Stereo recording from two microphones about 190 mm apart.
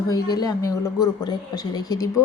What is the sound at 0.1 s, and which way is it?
A woman's voice, 20° left (ahead or behind).